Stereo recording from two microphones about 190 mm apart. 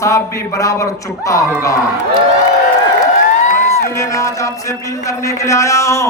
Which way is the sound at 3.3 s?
40° left (ahead or behind).